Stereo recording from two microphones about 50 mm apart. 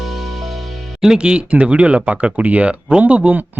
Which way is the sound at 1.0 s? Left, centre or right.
Centre.